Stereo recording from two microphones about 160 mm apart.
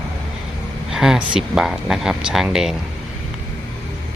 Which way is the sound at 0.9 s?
5° right (ahead or behind).